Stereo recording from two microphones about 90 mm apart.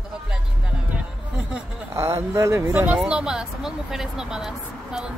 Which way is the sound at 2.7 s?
20° right (ahead or behind).